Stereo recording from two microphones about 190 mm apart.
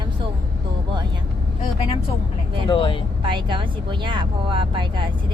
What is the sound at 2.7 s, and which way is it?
Speech, 25° left (ahead or behind).